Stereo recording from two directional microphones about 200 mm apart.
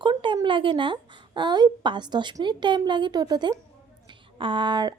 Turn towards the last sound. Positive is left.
turn(degrees=-20)  # may be behind; listen again after turning